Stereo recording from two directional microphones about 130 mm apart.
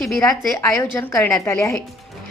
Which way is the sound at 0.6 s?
20° left (ahead or behind).